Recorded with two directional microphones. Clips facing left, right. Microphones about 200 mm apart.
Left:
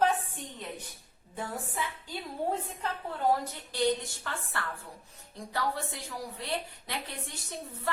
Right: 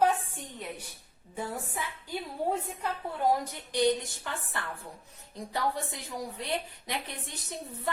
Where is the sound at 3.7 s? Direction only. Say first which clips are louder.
Right 2 dB; 15° right (ahead or behind).